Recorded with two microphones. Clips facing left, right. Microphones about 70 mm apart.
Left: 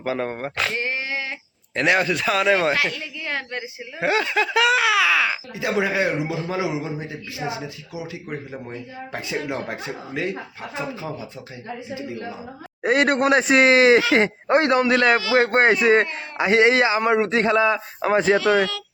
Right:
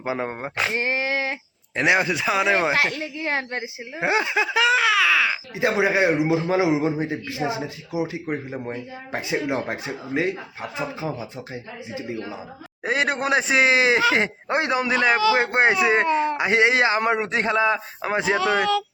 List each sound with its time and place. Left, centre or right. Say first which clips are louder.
0.0 s a man's voice: left 1 dB; centre; by 1.4 s right
1.7 s speech: even; centre
2.7 s speech: right 2 dB; right
3.9 s speech: left 1 dB; centre
5.7 s a man's voice: right 1 dB; right
12.8 s speech: left 5 dB; centre
16.1 s a man's voice: even; centre
17.2 s speech: left 3 dB; centre